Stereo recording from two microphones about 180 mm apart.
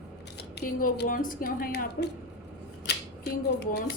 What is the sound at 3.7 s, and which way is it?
Speech, 65° left (ahead or behind).